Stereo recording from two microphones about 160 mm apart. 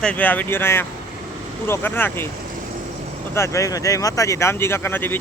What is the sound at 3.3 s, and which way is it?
Speech, 15° left (ahead or behind).